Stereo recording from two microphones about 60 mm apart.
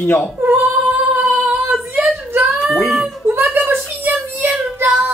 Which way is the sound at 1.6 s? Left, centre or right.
Right.